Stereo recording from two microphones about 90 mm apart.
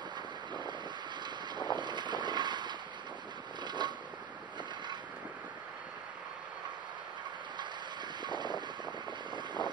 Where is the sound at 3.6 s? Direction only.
55° right (ahead or behind).